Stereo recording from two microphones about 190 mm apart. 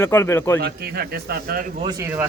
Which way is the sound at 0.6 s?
55° right (ahead or behind).